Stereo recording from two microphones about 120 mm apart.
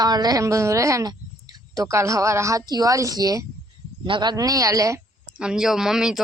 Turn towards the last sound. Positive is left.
turn(degrees=-5)  # may be behind; listen again after turning